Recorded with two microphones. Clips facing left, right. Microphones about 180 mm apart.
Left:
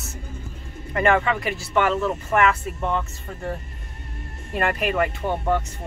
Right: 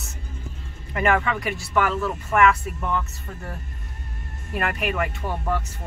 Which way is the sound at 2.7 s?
30° left (ahead or behind).